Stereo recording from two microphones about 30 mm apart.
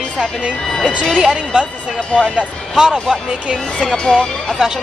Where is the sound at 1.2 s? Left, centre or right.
Right.